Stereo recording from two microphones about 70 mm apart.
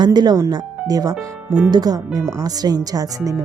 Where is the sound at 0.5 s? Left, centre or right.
Right.